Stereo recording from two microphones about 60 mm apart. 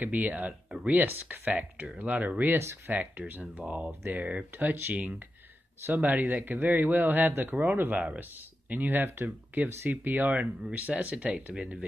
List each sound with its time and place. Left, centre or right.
0.0 s a man's voice: right